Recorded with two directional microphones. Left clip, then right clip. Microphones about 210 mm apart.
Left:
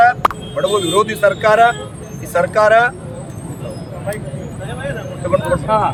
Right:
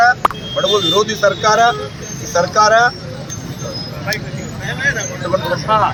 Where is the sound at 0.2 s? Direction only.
Centre (ahead or behind).